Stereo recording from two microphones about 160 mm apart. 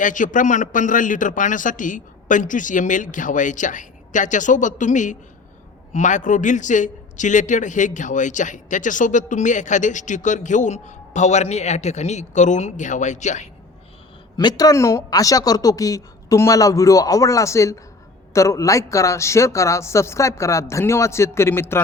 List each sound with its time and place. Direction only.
0.0 s a man's voice: 55° left (ahead or behind)
14.3 s speech: 25° left (ahead or behind)